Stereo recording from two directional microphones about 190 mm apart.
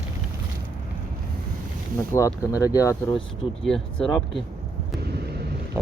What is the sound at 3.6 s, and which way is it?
Speech, 5° left (ahead or behind).